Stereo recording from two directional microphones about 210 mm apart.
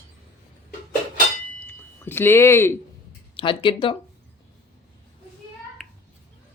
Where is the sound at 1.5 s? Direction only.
10° left (ahead or behind).